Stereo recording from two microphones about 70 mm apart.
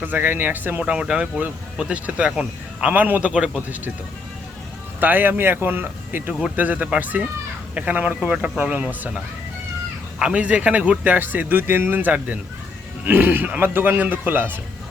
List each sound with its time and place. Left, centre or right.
0.0 s speech: right
0.8 s speech: centre
4.9 s speech: right